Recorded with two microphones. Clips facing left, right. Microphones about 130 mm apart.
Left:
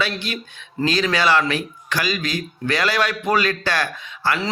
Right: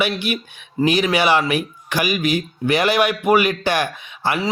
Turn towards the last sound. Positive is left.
turn(degrees=-15)  # may be behind; listen again after turning